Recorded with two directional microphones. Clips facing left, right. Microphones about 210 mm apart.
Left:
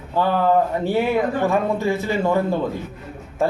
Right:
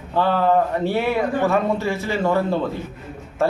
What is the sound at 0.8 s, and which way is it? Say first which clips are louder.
Speech: left 1 dB; 15° left (ahead or behind).